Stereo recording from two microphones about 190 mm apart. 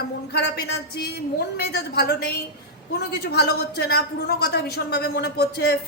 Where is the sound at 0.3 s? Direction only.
60° left (ahead or behind).